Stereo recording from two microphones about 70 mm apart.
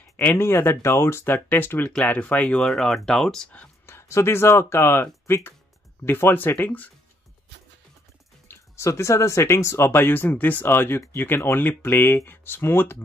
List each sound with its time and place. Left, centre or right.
0.4 s speech: left
1.9 s speech: centre
2.6 s speech: centre
3.8 s speech: left
8.5 s speech: left